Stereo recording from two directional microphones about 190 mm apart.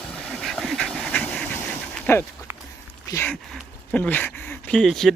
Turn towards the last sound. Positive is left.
turn(degrees=0)  # may be behind; listen again after turning